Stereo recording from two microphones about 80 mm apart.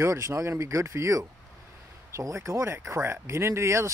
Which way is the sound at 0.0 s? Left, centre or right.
Right.